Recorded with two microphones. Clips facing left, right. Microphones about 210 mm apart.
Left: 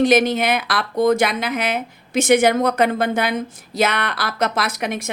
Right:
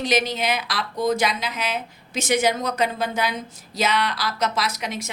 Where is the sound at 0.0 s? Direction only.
55° left (ahead or behind).